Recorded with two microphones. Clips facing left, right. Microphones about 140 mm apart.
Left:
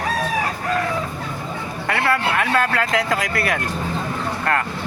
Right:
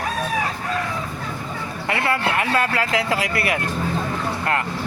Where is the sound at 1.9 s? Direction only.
25° right (ahead or behind).